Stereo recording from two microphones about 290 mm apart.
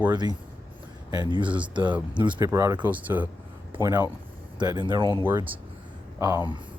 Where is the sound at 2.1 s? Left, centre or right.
Centre.